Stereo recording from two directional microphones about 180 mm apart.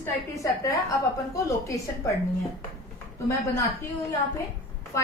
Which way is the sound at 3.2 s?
15° left (ahead or behind).